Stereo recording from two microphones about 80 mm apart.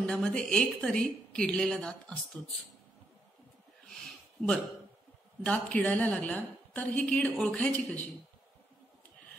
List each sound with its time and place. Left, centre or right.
0.2 s a woman's voice: centre
3.9 s a sound: centre
5.4 s a woman's voice: centre